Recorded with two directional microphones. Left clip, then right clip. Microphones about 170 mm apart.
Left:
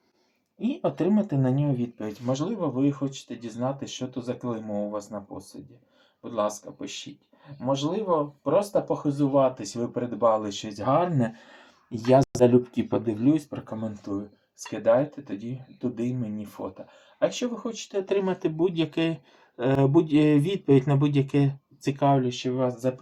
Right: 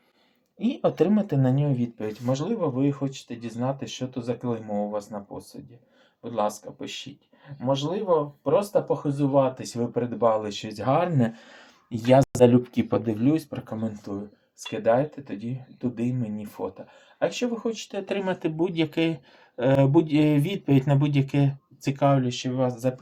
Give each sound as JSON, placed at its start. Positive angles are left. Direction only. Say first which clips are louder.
{"t": 0.6, "sound": "speech", "louder": "right 3 dB", "side_deg": -40}